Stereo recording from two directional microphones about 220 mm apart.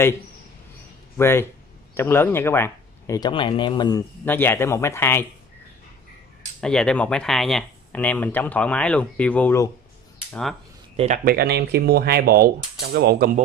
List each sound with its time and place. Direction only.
1.1 s speech: 10° left (ahead or behind)
6.6 s speech: 5° left (ahead or behind)
11.2 s speech: 45° right (ahead or behind)